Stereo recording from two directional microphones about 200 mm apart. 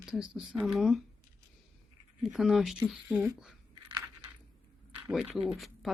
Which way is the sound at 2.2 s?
Centre (ahead or behind).